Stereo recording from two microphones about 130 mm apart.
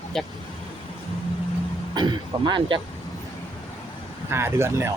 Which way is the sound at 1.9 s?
35° right (ahead or behind).